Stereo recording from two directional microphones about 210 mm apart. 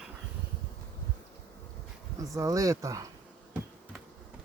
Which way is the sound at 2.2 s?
15° right (ahead or behind).